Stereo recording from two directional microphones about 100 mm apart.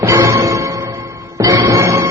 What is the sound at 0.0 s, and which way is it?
Music, 30° right (ahead or behind).